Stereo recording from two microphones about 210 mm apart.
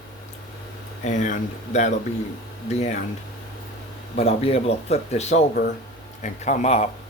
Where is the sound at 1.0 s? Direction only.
35° left (ahead or behind).